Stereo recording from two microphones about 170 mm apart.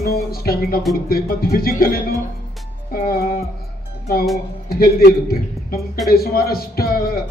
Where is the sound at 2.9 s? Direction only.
60° left (ahead or behind).